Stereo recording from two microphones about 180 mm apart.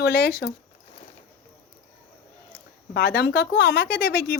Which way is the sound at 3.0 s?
60° left (ahead or behind).